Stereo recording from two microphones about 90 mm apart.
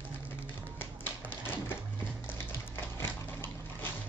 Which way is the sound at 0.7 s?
20° left (ahead or behind).